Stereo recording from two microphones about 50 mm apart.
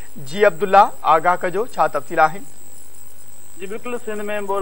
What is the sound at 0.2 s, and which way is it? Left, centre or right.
Speech, centre.